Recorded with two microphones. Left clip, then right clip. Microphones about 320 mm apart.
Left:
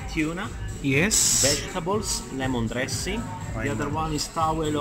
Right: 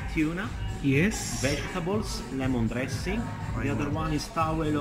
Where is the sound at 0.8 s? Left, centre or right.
Centre.